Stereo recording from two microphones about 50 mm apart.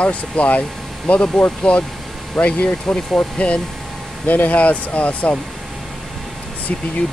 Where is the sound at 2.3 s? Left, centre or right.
Left.